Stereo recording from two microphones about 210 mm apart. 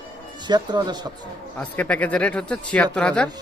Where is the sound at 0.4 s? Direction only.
20° right (ahead or behind).